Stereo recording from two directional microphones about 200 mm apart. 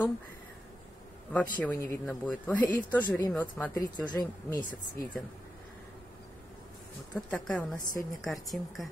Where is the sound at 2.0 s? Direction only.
5° left (ahead or behind).